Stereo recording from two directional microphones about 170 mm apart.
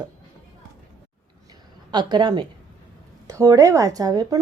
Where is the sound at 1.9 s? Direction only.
25° right (ahead or behind).